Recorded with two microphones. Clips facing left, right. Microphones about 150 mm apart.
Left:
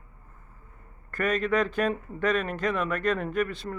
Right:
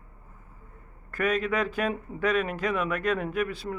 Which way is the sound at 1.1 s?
10° right (ahead or behind).